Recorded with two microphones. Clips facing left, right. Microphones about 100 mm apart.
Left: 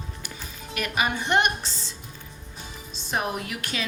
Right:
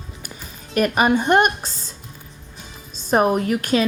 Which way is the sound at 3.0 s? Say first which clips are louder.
Right 11 dB; 45° right (ahead or behind).